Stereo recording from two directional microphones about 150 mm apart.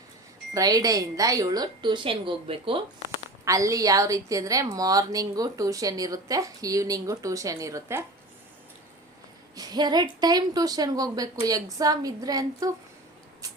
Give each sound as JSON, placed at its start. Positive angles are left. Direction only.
{"t": 0.5, "sound": "a woman's voice", "side_deg": -25}
{"t": 3.4, "sound": "a woman's voice", "side_deg": -20}
{"t": 9.6, "sound": "a woman's voice", "side_deg": -30}